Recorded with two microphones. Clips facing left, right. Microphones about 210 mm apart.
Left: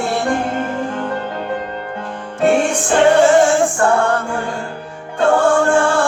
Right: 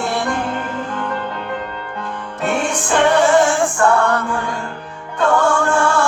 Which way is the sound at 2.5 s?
35° left (ahead or behind).